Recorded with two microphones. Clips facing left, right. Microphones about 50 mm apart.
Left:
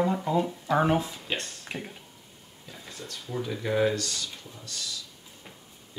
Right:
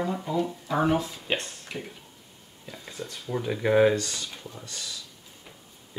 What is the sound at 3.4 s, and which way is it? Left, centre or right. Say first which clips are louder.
Speech: right 5 dB; right.